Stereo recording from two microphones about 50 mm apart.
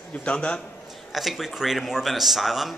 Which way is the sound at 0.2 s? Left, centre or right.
Left.